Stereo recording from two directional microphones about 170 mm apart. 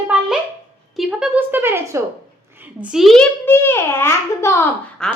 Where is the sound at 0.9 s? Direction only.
10° right (ahead or behind).